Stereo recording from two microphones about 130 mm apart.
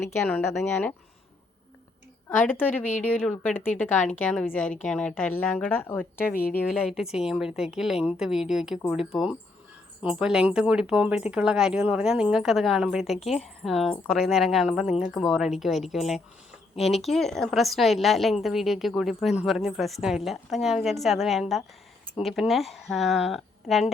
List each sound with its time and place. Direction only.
0.3 s a woman's voice: 15° left (ahead or behind)
2.3 s a woman's voice: 15° left (ahead or behind)
6.7 s speech: 5° right (ahead or behind)